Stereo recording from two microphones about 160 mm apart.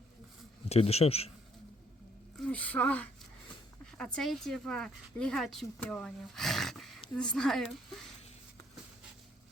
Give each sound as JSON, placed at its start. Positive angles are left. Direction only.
{"t": 0.7, "sound": "a man's voice", "side_deg": 40}
{"t": 2.4, "sound": "a sound", "side_deg": 10}
{"t": 3.9, "sound": "speech", "side_deg": 5}